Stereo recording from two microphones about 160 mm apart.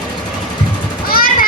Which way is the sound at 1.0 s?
65° left (ahead or behind).